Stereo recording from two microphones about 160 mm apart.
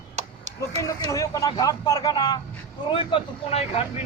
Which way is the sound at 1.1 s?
20° left (ahead or behind).